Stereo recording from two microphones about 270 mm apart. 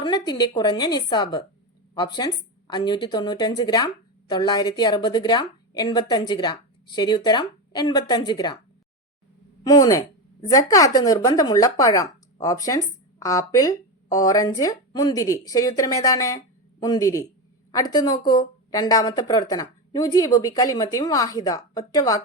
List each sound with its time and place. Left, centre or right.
0.0 s speech: centre
9.6 s speech: centre